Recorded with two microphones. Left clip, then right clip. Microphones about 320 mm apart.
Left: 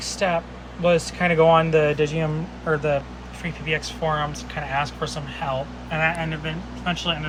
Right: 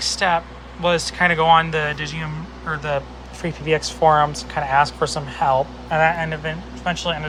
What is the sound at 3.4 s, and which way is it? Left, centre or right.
Speech, right.